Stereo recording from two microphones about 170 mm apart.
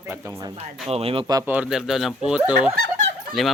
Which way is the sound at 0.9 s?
35° right (ahead or behind).